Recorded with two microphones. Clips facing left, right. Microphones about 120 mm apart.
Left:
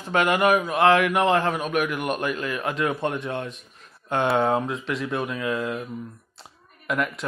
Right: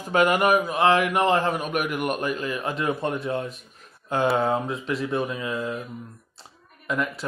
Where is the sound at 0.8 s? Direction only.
35° right (ahead or behind).